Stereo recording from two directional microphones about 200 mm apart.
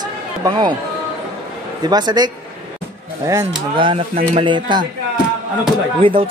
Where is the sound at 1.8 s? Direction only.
20° right (ahead or behind).